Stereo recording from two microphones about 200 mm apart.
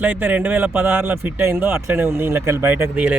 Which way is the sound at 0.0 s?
10° right (ahead or behind).